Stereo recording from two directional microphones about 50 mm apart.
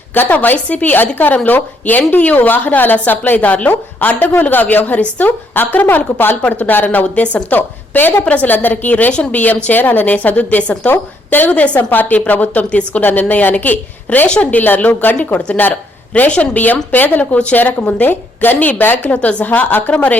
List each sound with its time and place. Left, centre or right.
0.1 s a woman's voice: left
10.8 s a woman's voice: left
11.8 s a woman's voice: left
17.7 s a woman's voice: left
18.0 s a woman's voice: left